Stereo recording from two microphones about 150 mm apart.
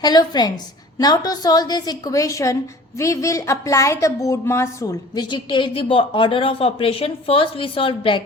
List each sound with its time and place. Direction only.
0.0 s a woman's voice: 25° left (ahead or behind)